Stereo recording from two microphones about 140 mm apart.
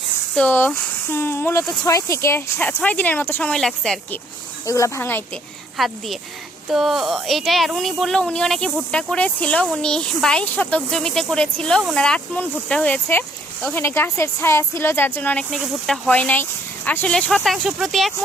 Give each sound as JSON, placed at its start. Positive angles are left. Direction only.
{"t": 0.3, "sound": "speech", "side_deg": 10}
{"t": 4.6, "sound": "speech", "side_deg": 20}
{"t": 5.7, "sound": "speech", "side_deg": 0}
{"t": 13.8, "sound": "speech", "side_deg": 15}
{"t": 15.4, "sound": "speech", "side_deg": 0}
{"t": 16.0, "sound": "speech", "side_deg": 10}